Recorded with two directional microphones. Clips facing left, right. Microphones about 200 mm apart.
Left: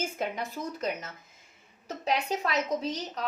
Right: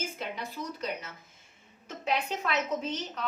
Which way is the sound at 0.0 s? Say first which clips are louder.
Left 4 dB; 45° left (ahead or behind).